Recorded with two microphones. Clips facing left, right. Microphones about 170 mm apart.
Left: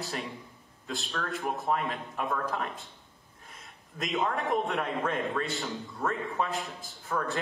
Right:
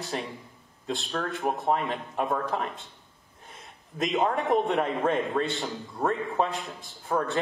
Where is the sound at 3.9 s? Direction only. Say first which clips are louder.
Right 5 dB; centre (ahead or behind).